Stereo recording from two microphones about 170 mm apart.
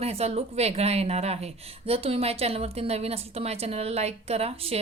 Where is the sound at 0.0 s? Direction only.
35° right (ahead or behind).